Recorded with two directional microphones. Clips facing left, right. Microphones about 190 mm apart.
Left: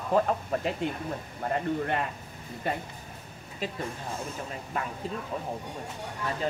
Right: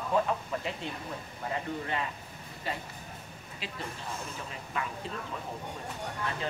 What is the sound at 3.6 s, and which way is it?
Speech, 45° left (ahead or behind).